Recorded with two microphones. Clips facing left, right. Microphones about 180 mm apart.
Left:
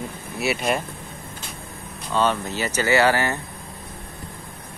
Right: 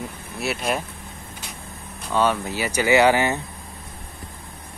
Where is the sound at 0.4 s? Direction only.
Centre (ahead or behind).